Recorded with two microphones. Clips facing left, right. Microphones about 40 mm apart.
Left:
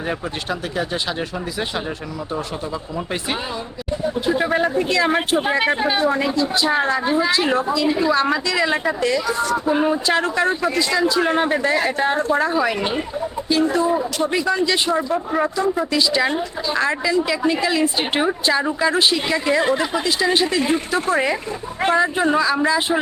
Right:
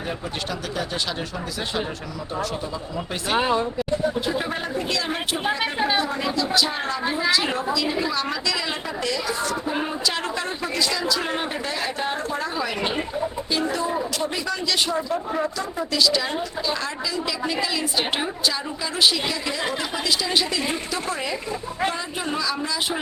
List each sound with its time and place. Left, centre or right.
4.3 s speech: left
5.4 s speech: centre
6.3 s speech: left
7.0 s speech: centre
7.5 s a woman's voice: left
9.7 s speech: centre
10.3 s speech: left
11.7 s a woman's voice: left
13.6 s a woman's voice: left